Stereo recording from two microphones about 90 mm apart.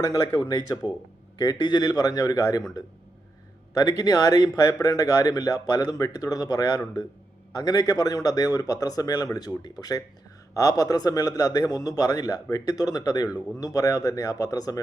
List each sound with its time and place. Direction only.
0.4 s speech: 50° left (ahead or behind)
3.8 s speech: 45° left (ahead or behind)